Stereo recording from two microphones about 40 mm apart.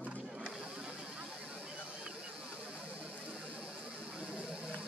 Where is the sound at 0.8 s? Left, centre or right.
Right.